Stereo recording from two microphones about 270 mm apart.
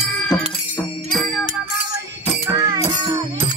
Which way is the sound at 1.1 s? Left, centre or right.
Centre.